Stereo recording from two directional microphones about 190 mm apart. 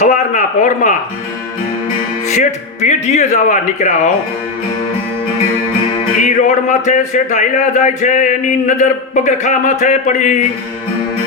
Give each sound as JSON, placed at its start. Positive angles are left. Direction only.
{"t": 0.0, "sound": "a man's voice", "side_deg": 40}
{"t": 2.2, "sound": "speech", "side_deg": 40}
{"t": 6.2, "sound": "speech", "side_deg": 40}